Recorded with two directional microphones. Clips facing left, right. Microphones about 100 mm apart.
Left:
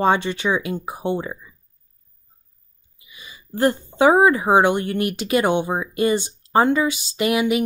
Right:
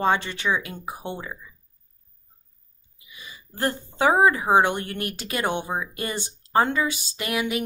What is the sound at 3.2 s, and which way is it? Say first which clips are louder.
Speech: left 8 dB; 15° left (ahead or behind).